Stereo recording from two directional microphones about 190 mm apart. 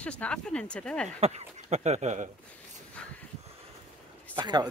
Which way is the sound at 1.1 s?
35° right (ahead or behind).